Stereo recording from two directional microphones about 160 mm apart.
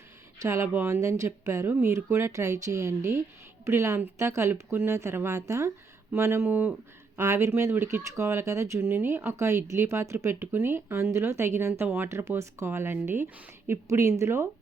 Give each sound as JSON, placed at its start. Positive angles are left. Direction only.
{"t": 0.4, "sound": "speech", "side_deg": -15}